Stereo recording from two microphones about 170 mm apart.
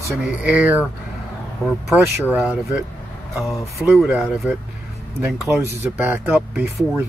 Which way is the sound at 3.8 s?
5° right (ahead or behind).